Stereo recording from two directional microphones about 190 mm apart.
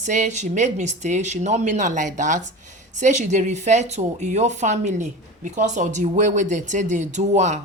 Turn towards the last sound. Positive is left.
turn(degrees=-40)  # may be behind; listen again after turning